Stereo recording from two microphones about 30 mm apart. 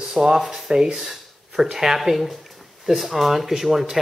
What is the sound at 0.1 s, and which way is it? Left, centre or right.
Speech, right.